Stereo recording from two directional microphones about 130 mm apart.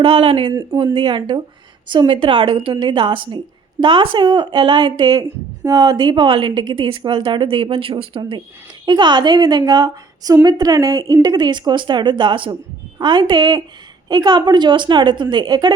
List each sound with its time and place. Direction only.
0.0 s a woman's voice: 40° right (ahead or behind)
0.5 s speech: 25° right (ahead or behind)
0.9 s a woman's voice: 35° right (ahead or behind)